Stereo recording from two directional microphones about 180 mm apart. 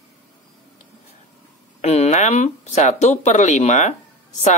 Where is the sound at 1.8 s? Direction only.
40° left (ahead or behind).